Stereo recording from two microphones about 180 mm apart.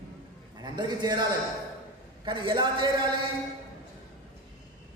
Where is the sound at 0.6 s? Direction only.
25° right (ahead or behind).